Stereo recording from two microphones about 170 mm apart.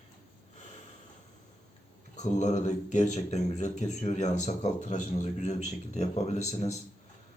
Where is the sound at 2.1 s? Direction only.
45° left (ahead or behind).